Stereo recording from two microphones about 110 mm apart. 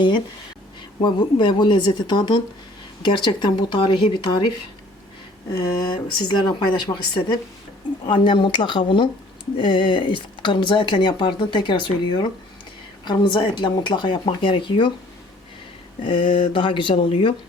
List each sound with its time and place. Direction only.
1.0 s speech: 45° left (ahead or behind)
5.6 s speech: 45° left (ahead or behind)
16.0 s speech: 50° left (ahead or behind)